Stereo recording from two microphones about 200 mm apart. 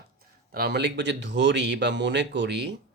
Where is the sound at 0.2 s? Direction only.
50° right (ahead or behind).